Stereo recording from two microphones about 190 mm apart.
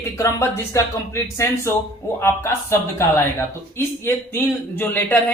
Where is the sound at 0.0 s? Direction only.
15° left (ahead or behind).